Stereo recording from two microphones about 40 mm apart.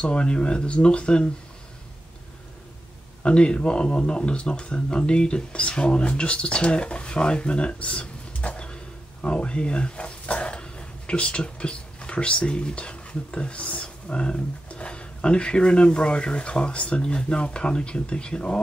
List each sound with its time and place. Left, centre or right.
0.0 s speech: left
3.2 s speech: left